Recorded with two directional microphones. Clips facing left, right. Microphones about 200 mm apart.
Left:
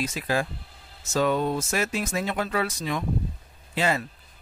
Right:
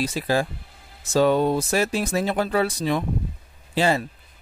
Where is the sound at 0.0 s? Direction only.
35° right (ahead or behind).